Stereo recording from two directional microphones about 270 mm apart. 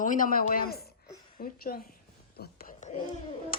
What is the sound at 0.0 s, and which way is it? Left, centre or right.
Speech, left.